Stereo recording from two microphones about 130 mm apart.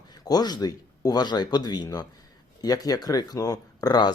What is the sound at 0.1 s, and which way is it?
A man's voice, 30° left (ahead or behind).